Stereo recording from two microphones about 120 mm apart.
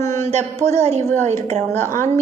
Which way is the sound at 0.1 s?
70° right (ahead or behind).